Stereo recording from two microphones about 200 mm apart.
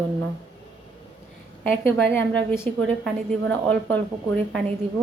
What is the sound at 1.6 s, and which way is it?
A woman's voice, 5° left (ahead or behind).